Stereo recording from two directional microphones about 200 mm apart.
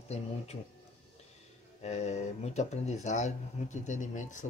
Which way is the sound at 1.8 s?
35° left (ahead or behind).